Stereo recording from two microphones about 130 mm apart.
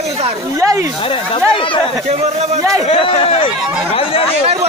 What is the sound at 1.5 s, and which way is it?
Speech, 40° left (ahead or behind).